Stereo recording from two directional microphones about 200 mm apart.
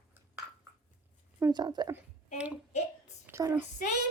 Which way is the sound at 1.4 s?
20° right (ahead or behind).